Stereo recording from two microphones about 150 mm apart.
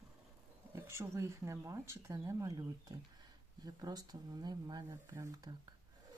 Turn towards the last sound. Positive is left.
turn(degrees=-25)  # may be behind; listen again after turning